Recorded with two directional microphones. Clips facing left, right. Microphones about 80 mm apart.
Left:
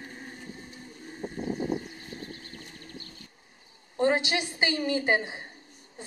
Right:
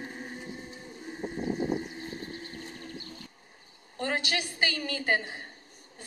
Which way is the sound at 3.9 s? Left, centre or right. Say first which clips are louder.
Left 6 dB; left.